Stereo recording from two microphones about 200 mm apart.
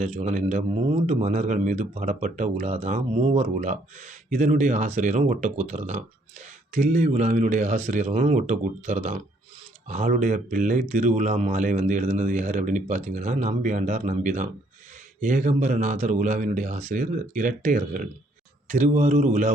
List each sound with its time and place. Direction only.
0.0 s speech: 35° right (ahead or behind)